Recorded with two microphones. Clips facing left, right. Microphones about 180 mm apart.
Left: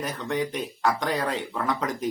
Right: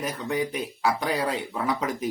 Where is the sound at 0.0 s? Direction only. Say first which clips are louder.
Even; 10° right (ahead or behind).